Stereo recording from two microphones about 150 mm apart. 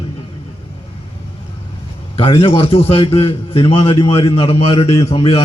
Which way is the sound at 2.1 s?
35° left (ahead or behind).